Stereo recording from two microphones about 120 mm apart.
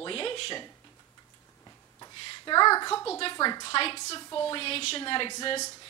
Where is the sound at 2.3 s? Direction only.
35° left (ahead or behind).